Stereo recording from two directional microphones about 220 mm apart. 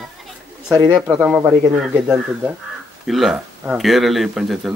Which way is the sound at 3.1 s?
Centre (ahead or behind).